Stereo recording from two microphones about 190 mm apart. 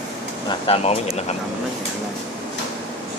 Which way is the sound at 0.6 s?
30° left (ahead or behind).